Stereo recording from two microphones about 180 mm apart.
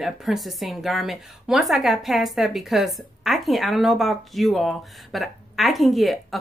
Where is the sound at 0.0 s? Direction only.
Centre (ahead or behind).